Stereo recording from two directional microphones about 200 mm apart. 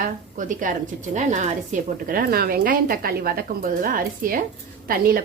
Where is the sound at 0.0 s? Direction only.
40° right (ahead or behind).